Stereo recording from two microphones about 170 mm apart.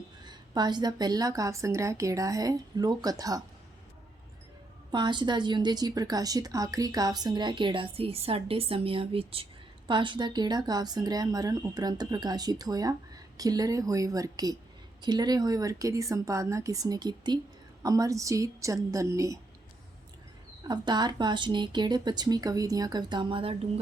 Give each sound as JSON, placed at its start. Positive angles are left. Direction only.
{"t": 0.3, "sound": "a woman's voice", "side_deg": -25}
{"t": 4.9, "sound": "a woman's voice", "side_deg": -25}
{"t": 20.7, "sound": "a woman's voice", "side_deg": -25}